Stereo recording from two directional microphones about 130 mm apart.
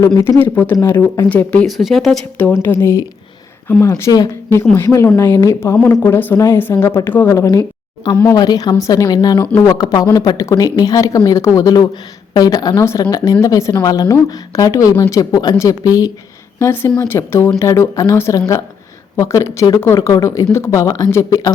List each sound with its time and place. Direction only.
0.0 s speech: 25° left (ahead or behind)
1.6 s speech: centre (ahead or behind)
2.6 s speech: 20° left (ahead or behind)
8.4 s a woman's voice: 30° left (ahead or behind)